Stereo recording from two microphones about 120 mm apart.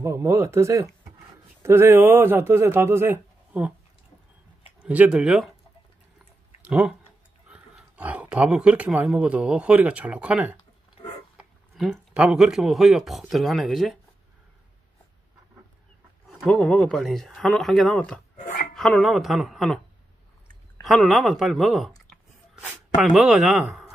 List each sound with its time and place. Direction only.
0.0 s speech: 20° right (ahead or behind)
4.8 s speech: 10° right (ahead or behind)
6.6 s speech: 10° right (ahead or behind)
11.3 s a sound: centre (ahead or behind)
12.1 s speech: 10° right (ahead or behind)
16.3 s speech: centre (ahead or behind)
20.8 s speech: centre (ahead or behind)